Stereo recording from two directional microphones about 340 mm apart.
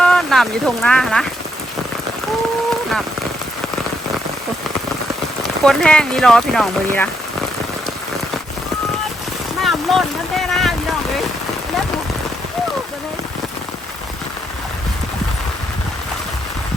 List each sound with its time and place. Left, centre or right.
0.0 s speech: centre
5.6 s speech: centre
9.6 s boat: centre